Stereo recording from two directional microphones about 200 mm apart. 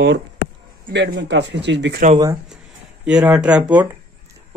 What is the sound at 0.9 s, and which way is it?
Speech, 55° right (ahead or behind).